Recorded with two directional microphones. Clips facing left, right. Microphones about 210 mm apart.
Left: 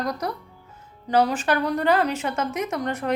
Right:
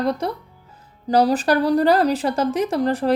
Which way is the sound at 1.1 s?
35° right (ahead or behind).